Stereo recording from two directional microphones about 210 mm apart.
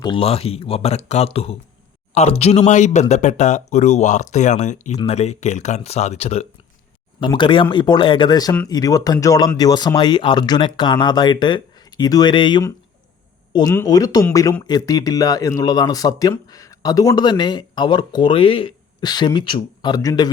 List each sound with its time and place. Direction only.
0.0 s speech: 25° left (ahead or behind)